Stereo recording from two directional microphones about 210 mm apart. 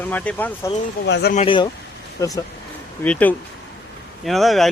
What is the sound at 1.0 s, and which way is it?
Speech, 55° left (ahead or behind).